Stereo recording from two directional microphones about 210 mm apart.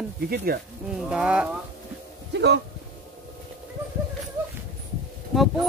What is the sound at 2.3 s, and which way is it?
Speech, 55° right (ahead or behind).